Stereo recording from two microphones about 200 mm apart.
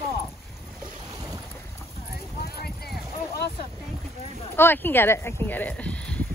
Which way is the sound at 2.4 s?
50° left (ahead or behind).